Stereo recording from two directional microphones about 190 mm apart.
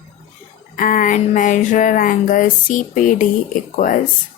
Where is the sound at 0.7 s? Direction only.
45° left (ahead or behind).